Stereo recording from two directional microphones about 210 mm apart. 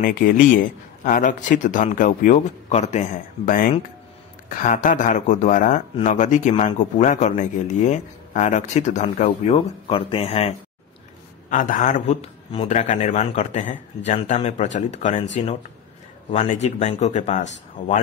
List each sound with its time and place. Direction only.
0.0 s speech: 40° left (ahead or behind)
11.5 s speech: 40° left (ahead or behind)
16.3 s speech: 30° left (ahead or behind)